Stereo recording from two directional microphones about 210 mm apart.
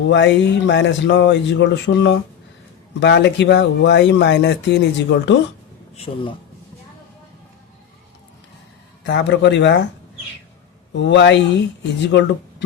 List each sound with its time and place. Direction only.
0.1 s speech: 55° left (ahead or behind)
6.1 s speech: 30° left (ahead or behind)
9.0 s speech: 55° left (ahead or behind)
10.9 s speech: 55° left (ahead or behind)